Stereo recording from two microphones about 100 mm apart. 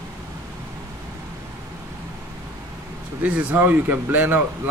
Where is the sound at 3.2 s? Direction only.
15° right (ahead or behind).